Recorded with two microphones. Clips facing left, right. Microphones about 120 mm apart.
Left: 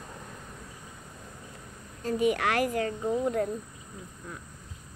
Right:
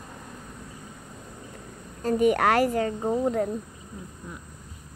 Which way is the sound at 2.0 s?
45° right (ahead or behind).